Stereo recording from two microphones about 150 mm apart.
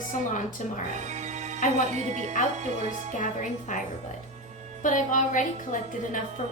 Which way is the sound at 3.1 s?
55° left (ahead or behind).